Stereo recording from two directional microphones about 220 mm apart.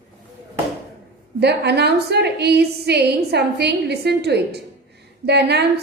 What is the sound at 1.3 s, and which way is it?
A woman's voice, 50° right (ahead or behind).